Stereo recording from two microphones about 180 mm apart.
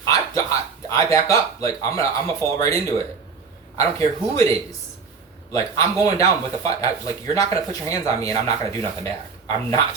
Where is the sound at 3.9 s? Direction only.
20° left (ahead or behind).